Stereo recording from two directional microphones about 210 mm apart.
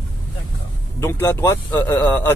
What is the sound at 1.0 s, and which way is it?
Speech, 10° left (ahead or behind).